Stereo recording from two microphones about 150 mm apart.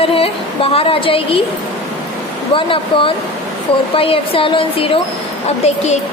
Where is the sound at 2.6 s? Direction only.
35° left (ahead or behind).